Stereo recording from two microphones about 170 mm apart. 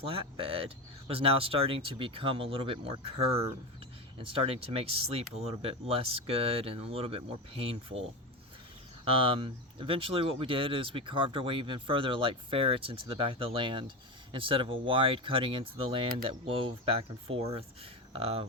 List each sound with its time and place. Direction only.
0.0 s speech: 35° right (ahead or behind)
9.0 s speech: 30° right (ahead or behind)